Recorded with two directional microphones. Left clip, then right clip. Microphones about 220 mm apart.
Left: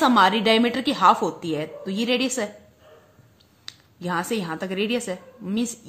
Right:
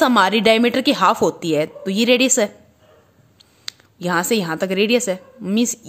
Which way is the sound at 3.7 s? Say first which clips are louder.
Right 7 dB; 45° right (ahead or behind).